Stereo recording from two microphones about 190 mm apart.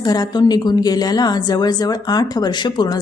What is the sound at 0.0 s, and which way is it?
A woman's voice, 20° left (ahead or behind).